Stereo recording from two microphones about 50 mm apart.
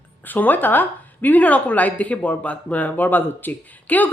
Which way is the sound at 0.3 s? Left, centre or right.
Left.